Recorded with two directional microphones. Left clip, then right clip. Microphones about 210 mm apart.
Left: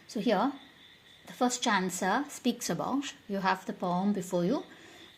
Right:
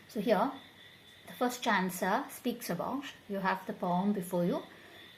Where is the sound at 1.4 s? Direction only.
35° left (ahead or behind).